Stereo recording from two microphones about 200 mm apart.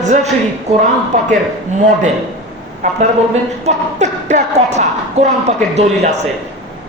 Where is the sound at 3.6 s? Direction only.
35° right (ahead or behind).